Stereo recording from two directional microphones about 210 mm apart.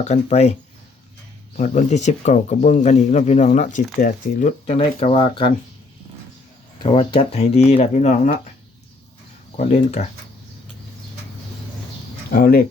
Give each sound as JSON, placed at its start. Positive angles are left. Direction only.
{"t": 0.0, "sound": "speech", "side_deg": 30}
{"t": 1.5, "sound": "speech", "side_deg": 35}
{"t": 6.8, "sound": "speech", "side_deg": 25}
{"t": 9.6, "sound": "speech", "side_deg": 30}
{"t": 12.3, "sound": "speech", "side_deg": 45}